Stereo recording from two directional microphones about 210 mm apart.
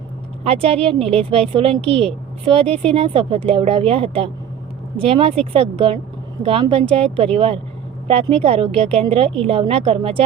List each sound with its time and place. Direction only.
0.4 s a woman's voice: 25° right (ahead or behind)